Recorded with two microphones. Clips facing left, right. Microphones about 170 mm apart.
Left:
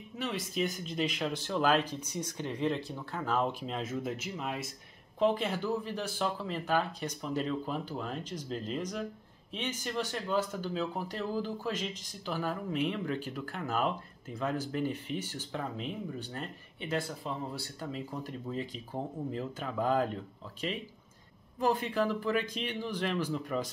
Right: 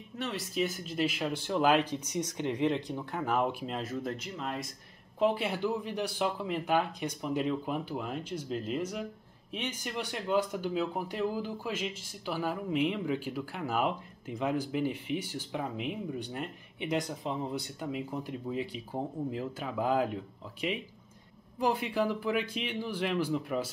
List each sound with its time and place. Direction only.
0.2 s speech: centre (ahead or behind)
3.6 s speech: centre (ahead or behind)
5.2 s speech: 10° right (ahead or behind)